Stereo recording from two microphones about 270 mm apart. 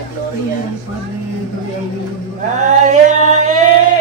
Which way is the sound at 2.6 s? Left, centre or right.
Right.